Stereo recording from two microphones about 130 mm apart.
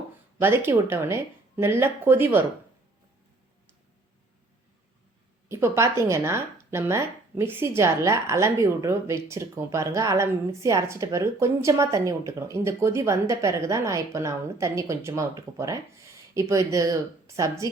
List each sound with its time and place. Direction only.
0.3 s speech: 15° right (ahead or behind)
5.5 s speech: 20° right (ahead or behind)